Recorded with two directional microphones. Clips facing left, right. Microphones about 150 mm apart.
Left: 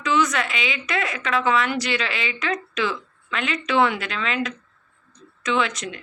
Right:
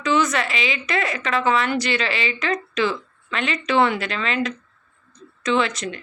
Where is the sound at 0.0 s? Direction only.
Centre (ahead or behind).